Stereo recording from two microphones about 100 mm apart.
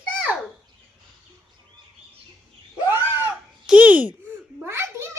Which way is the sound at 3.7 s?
15° right (ahead or behind).